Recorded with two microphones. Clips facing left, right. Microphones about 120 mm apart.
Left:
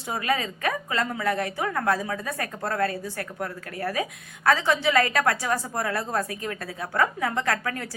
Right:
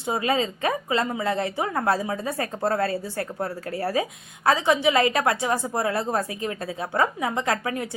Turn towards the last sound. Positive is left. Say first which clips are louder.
# right 2 dB
turn(degrees=-20)  # may be behind; listen again after turning